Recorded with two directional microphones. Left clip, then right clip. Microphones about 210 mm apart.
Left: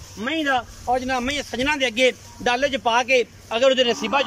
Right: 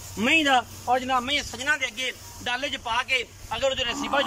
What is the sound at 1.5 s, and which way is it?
Speech, 50° left (ahead or behind).